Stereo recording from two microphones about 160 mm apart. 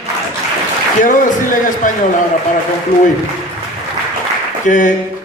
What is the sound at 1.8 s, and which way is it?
Speech, 55° left (ahead or behind).